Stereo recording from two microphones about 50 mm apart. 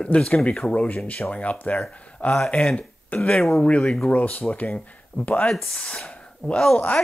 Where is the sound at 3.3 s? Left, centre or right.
Centre.